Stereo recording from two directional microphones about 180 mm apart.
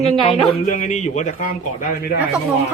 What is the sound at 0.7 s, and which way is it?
A man's voice, 45° left (ahead or behind).